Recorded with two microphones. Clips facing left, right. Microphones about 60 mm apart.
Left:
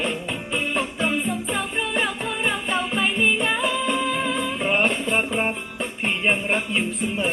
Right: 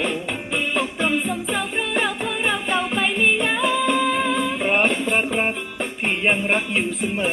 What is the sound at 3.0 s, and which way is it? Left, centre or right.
Music, right.